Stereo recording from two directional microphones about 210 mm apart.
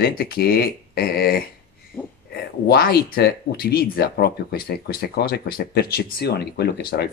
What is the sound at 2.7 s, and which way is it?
Speech, 50° left (ahead or behind).